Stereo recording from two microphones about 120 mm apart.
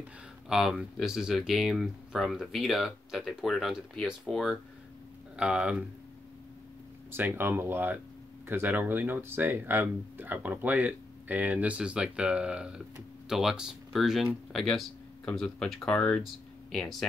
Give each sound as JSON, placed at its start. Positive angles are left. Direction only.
{"t": 0.5, "sound": "speech", "side_deg": -5}
{"t": 7.1, "sound": "speech", "side_deg": -15}